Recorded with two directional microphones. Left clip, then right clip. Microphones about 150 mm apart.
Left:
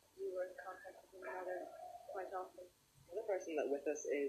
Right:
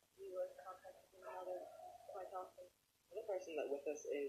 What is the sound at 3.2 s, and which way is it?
Speech, 30° left (ahead or behind).